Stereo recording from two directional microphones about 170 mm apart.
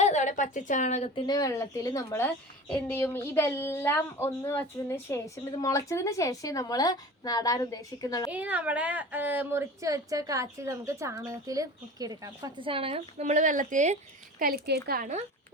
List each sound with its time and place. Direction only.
0.0 s a woman's voice: 45° left (ahead or behind)
1.1 s a woman's voice: 20° left (ahead or behind)
8.3 s speech: 10° right (ahead or behind); by 15.1 s 60° right (ahead or behind)